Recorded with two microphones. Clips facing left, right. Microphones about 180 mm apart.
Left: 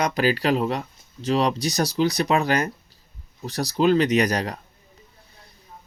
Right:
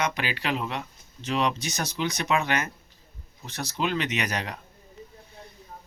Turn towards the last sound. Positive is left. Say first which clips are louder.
# left 9 dB
turn(degrees=40)  # may be behind; listen again after turning